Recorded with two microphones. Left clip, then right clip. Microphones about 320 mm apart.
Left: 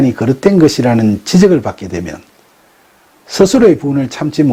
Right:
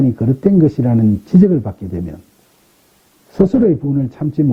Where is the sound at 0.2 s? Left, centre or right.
Centre.